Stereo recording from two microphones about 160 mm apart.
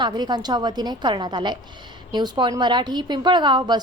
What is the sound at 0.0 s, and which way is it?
A woman's voice, 25° right (ahead or behind).